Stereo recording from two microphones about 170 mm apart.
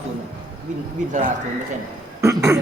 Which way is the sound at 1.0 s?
45° right (ahead or behind).